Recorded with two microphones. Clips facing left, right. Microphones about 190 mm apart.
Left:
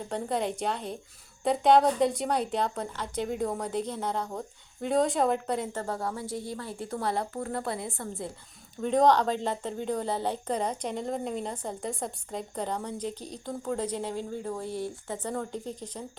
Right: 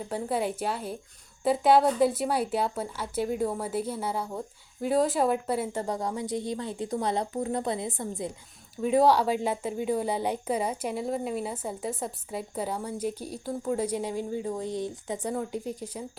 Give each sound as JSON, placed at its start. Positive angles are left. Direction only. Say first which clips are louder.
{"t": 0.1, "sound": "a woman's voice", "louder": "right 1 dB", "side_deg": -5}
{"t": 8.7, "sound": "speech", "louder": "right 1 dB", "side_deg": -5}